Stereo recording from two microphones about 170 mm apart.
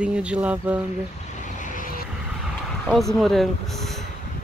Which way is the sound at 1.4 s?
50° left (ahead or behind).